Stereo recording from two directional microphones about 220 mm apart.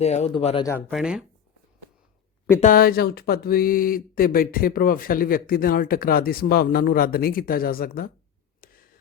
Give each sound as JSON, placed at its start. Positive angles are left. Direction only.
{"t": 0.0, "sound": "speech", "side_deg": 30}
{"t": 0.9, "sound": "speech", "side_deg": 0}
{"t": 2.6, "sound": "speech", "side_deg": 40}
{"t": 8.6, "sound": "a sound", "side_deg": 40}